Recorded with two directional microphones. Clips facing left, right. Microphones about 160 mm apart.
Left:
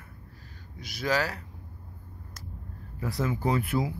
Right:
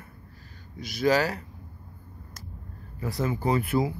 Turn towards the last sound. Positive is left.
turn(degrees=0)  # may be behind; listen again after turning